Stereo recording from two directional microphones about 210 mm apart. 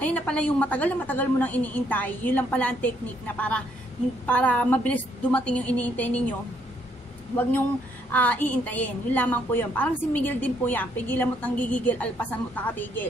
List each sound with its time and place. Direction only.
0.0 s a woman's voice: 5° left (ahead or behind)
8.1 s a woman's voice: 5° left (ahead or behind)